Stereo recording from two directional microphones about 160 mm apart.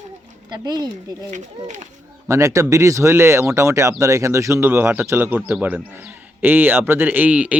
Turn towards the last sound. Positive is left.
turn(degrees=-10)  # may be behind; listen again after turning